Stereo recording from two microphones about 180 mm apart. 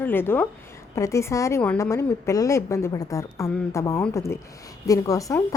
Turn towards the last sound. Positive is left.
turn(degrees=20)  # may be behind; listen again after turning